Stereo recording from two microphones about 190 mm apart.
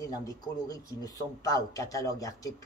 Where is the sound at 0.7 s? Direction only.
20° left (ahead or behind).